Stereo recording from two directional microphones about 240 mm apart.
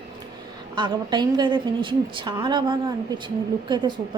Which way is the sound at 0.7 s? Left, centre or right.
Centre.